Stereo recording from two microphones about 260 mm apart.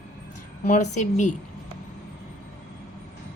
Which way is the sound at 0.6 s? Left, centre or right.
Left.